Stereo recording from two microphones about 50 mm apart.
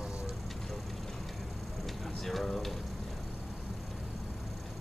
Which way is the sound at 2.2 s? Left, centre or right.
Centre.